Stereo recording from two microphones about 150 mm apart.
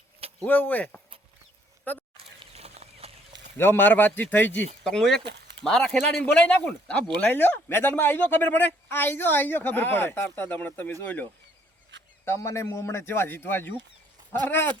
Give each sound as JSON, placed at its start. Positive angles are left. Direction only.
{"t": 0.4, "sound": "speech", "side_deg": 10}
{"t": 2.1, "sound": "a sound", "side_deg": -40}
{"t": 3.6, "sound": "speech", "side_deg": 15}